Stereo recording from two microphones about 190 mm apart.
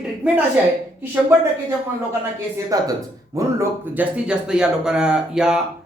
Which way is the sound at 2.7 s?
20° right (ahead or behind).